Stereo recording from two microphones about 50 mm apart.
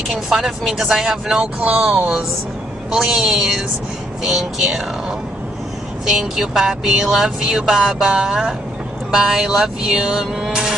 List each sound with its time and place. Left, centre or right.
0.1 s speech: centre
1.6 s speech: right; by 4.5 s centre
6.0 s speech: centre
10.4 s music: centre